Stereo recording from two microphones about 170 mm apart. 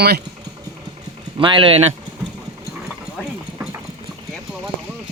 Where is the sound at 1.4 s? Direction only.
30° right (ahead or behind).